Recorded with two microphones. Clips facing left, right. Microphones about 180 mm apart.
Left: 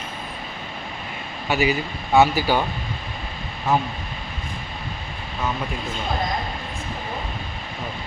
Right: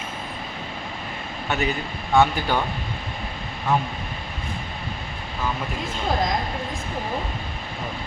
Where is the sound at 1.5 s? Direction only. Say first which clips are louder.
Left 4 dB; 5° left (ahead or behind).